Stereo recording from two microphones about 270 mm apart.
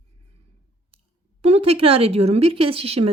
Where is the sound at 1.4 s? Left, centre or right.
Right.